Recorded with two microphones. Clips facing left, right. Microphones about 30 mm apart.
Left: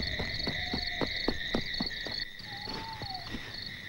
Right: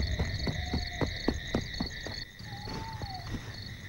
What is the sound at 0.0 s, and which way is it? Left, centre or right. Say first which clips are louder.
Owl: left 2 dB; left.